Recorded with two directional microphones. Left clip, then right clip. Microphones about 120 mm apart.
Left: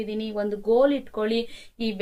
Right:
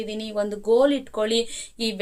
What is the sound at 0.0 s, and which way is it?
Speech, 30° right (ahead or behind).